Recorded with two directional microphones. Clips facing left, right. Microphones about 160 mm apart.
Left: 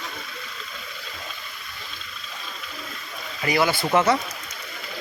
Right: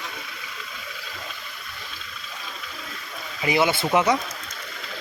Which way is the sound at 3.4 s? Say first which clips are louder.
Right 1 dB; 20° right (ahead or behind).